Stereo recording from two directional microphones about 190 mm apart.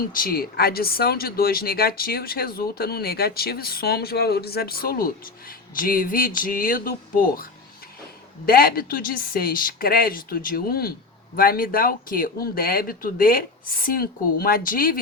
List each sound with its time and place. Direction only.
0.0 s speech: 50° left (ahead or behind)
8.4 s speech: 50° left (ahead or behind)